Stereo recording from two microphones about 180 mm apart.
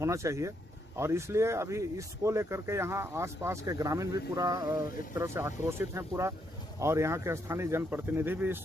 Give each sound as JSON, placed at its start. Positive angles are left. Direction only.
{"t": 0.0, "sound": "speech", "side_deg": -15}